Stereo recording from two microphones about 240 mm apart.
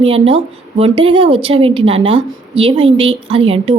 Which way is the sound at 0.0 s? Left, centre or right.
Right.